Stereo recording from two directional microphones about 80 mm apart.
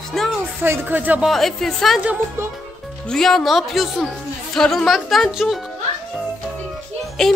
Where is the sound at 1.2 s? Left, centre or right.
Centre.